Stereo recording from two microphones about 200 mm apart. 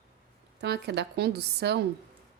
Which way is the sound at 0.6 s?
55° right (ahead or behind).